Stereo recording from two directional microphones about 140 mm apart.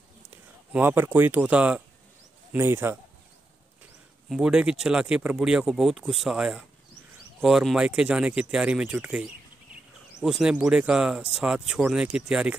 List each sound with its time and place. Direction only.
0.7 s speech: 15° right (ahead or behind)
4.3 s speech: 5° right (ahead or behind)